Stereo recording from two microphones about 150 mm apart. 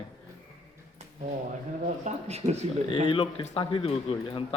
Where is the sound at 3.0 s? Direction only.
35° left (ahead or behind).